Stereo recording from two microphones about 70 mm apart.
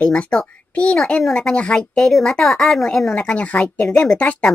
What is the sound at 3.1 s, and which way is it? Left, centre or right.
A child's voice, centre.